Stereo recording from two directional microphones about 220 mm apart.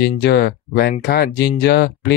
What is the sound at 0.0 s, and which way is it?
Speech, 45° left (ahead or behind).